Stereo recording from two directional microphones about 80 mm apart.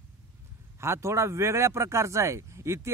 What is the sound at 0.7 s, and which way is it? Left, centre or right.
Speech, right.